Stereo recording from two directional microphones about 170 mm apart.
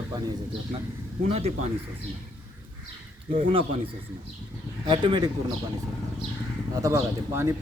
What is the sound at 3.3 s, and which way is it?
Speech, 30° right (ahead or behind).